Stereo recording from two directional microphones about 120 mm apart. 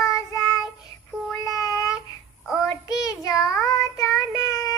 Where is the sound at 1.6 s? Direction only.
30° left (ahead or behind).